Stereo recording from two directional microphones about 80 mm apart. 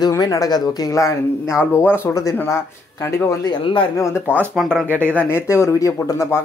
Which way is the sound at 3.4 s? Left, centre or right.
Left.